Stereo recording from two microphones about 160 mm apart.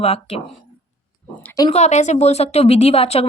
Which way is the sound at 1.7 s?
45° left (ahead or behind).